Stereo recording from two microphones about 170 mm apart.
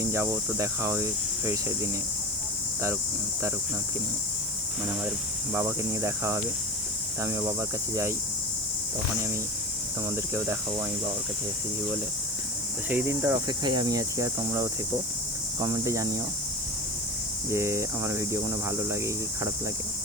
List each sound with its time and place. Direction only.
0.0 s speech: 15° right (ahead or behind)
5.5 s speech: 15° right (ahead or behind)
10.1 s speech: 15° right (ahead or behind)
12.9 s cricket: 10° right (ahead or behind)
17.5 s speech: 15° right (ahead or behind)